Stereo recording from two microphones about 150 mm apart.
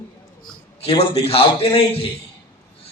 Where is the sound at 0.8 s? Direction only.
35° left (ahead or behind).